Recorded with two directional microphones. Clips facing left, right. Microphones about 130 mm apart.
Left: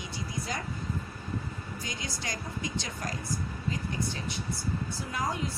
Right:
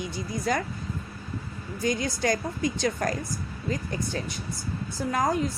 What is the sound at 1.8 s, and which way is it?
A woman's voice, 50° right (ahead or behind).